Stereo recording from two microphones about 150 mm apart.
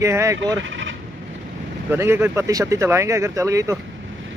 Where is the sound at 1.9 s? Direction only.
15° right (ahead or behind).